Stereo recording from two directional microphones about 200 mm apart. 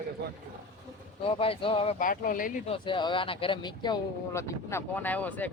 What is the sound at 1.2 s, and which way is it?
Speech, 25° left (ahead or behind).